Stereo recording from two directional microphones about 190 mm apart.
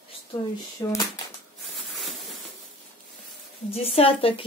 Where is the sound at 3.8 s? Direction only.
30° left (ahead or behind).